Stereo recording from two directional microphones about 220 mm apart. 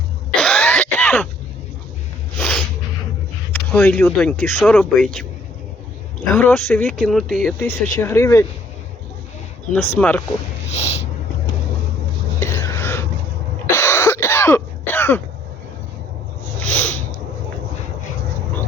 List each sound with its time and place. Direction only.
0.3 s throat clearing: 5° left (ahead or behind)
2.4 s a sound: 5° left (ahead or behind)
3.5 s speech: 10° left (ahead or behind)
6.2 s speech: 10° left (ahead or behind)
7.9 s speech: 10° left (ahead or behind)
9.7 s speech: 10° left (ahead or behind)
10.7 s snort: 30° left (ahead or behind)
12.5 s a sound: 10° left (ahead or behind)
13.7 s cough: 10° left (ahead or behind)
16.6 s a sound: 5° left (ahead or behind)